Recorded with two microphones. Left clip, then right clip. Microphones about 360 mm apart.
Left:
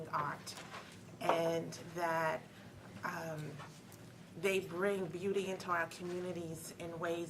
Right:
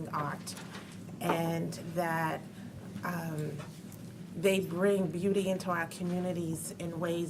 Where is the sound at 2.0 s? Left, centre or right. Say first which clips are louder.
Right 3 dB; left.